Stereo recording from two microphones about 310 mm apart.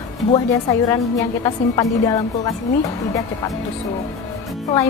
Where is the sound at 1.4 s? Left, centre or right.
Centre.